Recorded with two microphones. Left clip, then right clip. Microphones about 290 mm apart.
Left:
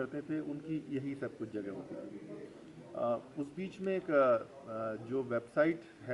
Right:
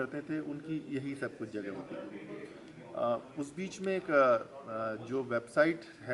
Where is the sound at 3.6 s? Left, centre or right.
Centre.